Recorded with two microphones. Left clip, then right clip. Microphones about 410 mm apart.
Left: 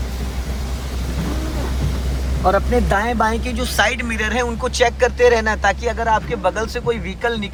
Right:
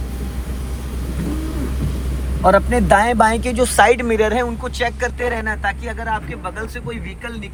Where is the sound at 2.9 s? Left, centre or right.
Centre.